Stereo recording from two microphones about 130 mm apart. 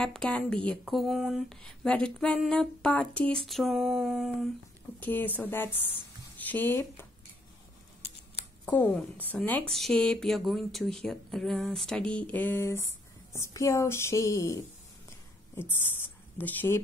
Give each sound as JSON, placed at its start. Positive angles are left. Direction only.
{"t": 0.0, "sound": "speech", "side_deg": 5}
{"t": 5.0, "sound": "speech", "side_deg": 15}
{"t": 8.6, "sound": "speech", "side_deg": 15}
{"t": 16.3, "sound": "speech", "side_deg": 15}